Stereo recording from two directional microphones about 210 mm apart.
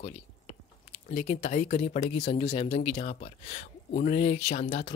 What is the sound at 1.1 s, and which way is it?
Speech, 35° left (ahead or behind).